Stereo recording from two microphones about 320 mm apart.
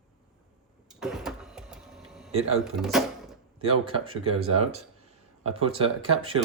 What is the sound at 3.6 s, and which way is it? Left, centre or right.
Speech, centre.